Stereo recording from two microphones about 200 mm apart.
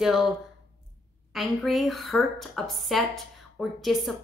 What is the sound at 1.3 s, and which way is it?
A woman's voice, centre (ahead or behind).